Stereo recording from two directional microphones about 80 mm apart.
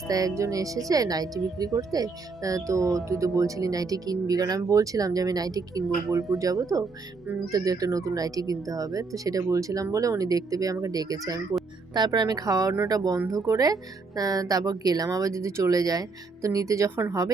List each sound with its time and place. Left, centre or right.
0.1 s speech: right